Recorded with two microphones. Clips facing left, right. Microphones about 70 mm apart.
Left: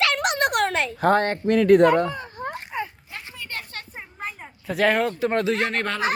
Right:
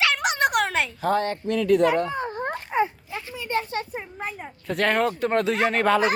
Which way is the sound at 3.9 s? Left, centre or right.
Centre.